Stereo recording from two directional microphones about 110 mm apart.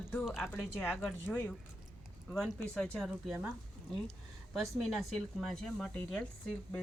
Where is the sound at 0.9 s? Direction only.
5° right (ahead or behind).